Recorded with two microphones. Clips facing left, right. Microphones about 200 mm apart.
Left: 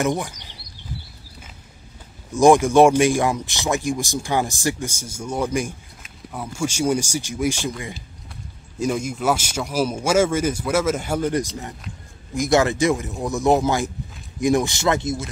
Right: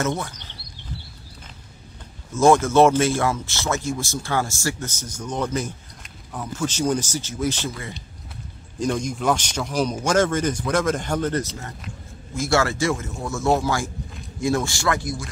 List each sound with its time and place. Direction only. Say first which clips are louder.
0.0 s speech: left 3 dB; 15° left (ahead or behind)
2.3 s speech: left 2 dB; 15° left (ahead or behind)